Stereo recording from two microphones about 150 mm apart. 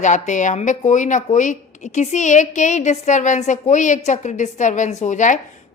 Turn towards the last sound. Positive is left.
turn(degrees=55)  # may be behind; listen again after turning